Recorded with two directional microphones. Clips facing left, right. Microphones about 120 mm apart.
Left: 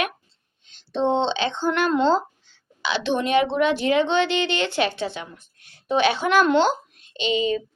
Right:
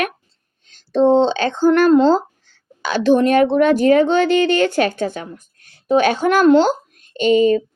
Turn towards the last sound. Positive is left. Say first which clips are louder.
# right 9 dB
turn(degrees=-45)  # may be behind; listen again after turning